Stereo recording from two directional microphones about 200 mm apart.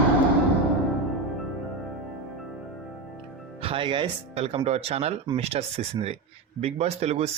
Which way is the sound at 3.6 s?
25° right (ahead or behind).